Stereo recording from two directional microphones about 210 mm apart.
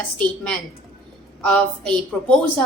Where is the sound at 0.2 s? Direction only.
5° left (ahead or behind).